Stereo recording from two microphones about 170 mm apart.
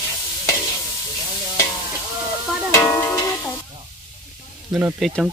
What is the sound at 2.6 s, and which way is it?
Music, 15° left (ahead or behind).